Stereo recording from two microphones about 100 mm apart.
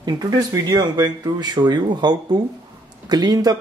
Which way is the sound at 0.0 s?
40° right (ahead or behind).